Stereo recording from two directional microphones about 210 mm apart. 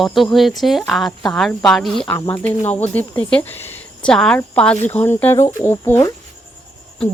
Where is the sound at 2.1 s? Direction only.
15° left (ahead or behind).